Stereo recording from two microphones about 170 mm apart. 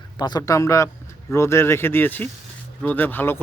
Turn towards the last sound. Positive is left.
turn(degrees=10)  # may be behind; listen again after turning